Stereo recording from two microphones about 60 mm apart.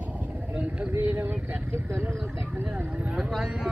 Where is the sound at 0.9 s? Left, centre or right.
Right.